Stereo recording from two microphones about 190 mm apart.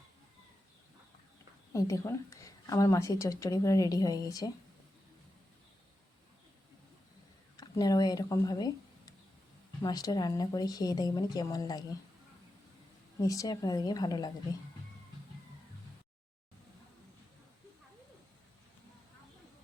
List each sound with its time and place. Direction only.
1.7 s a woman's voice: 15° left (ahead or behind)
7.5 s speech: 20° left (ahead or behind)
13.1 s speech: 20° left (ahead or behind)